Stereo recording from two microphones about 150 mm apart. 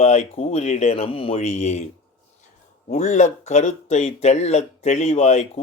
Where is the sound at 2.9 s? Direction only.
55° left (ahead or behind).